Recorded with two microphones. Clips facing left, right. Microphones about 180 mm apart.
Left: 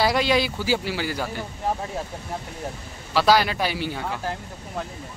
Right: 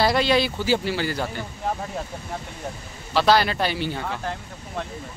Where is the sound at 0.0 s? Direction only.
10° left (ahead or behind).